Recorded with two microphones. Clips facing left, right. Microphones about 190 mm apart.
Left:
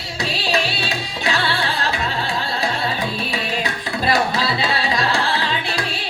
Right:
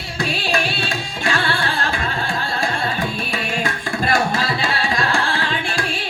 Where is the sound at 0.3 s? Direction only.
50° right (ahead or behind).